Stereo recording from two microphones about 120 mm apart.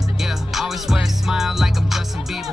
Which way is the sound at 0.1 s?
5° right (ahead or behind).